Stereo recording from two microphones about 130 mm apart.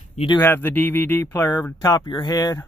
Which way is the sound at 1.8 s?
30° left (ahead or behind).